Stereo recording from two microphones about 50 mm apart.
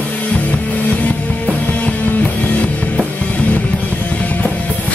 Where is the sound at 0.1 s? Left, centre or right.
Left.